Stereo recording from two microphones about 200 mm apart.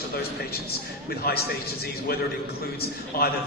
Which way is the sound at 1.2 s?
50° left (ahead or behind).